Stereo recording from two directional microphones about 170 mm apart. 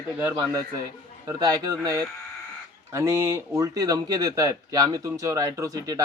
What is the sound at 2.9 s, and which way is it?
Speech, 15° right (ahead or behind).